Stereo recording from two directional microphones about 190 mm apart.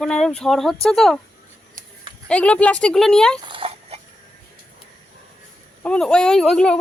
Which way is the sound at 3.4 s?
25° right (ahead or behind).